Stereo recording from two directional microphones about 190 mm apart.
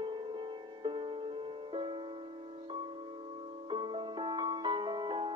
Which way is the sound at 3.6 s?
25° right (ahead or behind).